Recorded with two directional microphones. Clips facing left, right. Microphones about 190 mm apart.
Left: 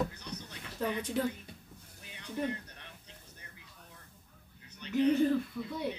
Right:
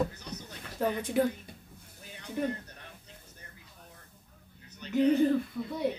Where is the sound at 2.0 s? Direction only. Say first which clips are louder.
Right 3 dB; 40° right (ahead or behind).